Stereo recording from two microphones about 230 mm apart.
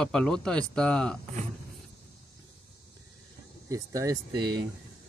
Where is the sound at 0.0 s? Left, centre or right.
Centre.